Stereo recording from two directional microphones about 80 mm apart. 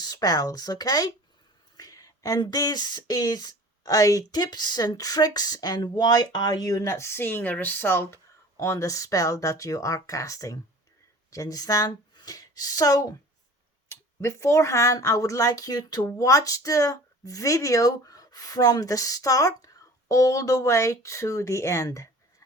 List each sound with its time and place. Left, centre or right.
0.0 s speech: left
6.9 s speech: left
8.5 s speech: left
13.8 s speech: left